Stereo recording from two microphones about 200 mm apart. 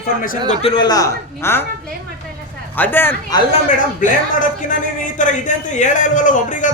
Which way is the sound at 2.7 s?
10° left (ahead or behind).